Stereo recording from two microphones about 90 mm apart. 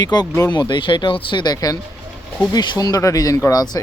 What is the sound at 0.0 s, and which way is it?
Speech, 50° left (ahead or behind).